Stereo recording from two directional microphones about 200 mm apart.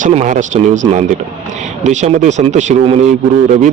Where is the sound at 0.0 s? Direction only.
35° right (ahead or behind).